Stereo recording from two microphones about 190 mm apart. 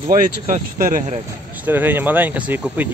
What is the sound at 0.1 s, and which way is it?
Speech, 45° right (ahead or behind).